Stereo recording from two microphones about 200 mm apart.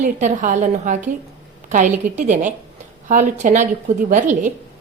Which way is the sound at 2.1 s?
40° right (ahead or behind).